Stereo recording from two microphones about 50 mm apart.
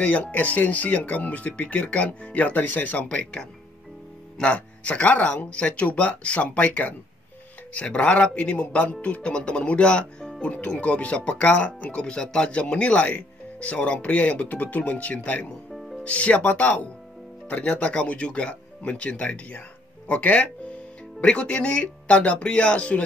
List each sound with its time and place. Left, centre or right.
0.0 s speech: left
4.5 s speech: left
15.7 s music: centre
16.0 s speech: left